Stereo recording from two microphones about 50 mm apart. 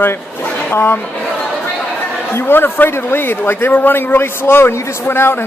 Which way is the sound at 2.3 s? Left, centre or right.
Left.